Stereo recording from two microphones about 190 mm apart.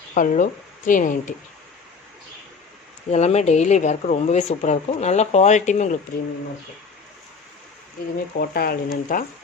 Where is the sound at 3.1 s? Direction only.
35° left (ahead or behind).